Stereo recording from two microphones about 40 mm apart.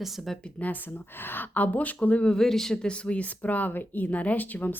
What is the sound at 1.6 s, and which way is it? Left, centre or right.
Speech, left.